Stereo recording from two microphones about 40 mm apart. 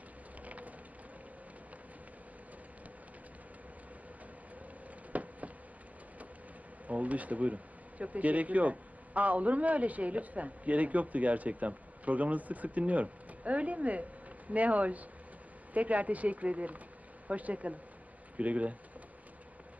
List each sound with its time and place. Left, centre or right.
0.4 s vehicle: right
5.1 s a sound: right
6.8 s speech: right